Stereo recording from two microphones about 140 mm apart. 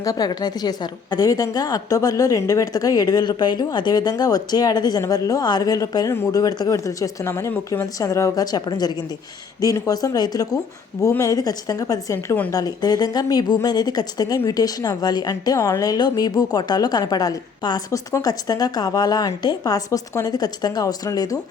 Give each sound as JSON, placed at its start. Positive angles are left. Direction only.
{"t": 0.0, "sound": "a woman's voice", "side_deg": 25}